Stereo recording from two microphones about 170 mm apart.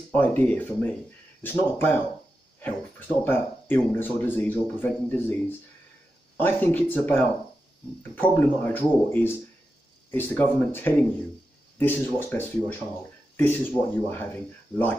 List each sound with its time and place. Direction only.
0.1 s speech: 10° left (ahead or behind)
6.3 s speech: 10° left (ahead or behind)